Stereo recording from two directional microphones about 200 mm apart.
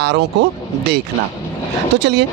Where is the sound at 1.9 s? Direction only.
60° right (ahead or behind).